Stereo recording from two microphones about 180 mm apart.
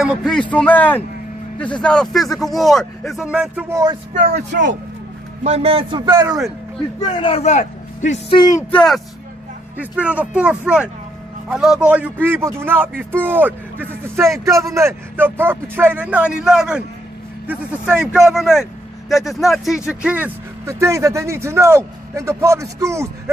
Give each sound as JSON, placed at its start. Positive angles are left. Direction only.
{"t": 0.0, "sound": "a man's voice", "side_deg": 0}
{"t": 4.3, "sound": "speech", "side_deg": -70}
{"t": 5.4, "sound": "a man's voice", "side_deg": -35}
{"t": 7.0, "sound": "a man's voice", "side_deg": 25}
{"t": 8.7, "sound": "a man's voice", "side_deg": 0}